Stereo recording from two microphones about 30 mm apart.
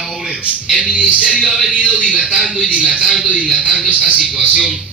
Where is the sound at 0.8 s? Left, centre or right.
Right.